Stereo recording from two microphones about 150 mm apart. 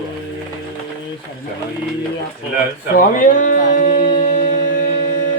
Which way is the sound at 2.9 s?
65° left (ahead or behind).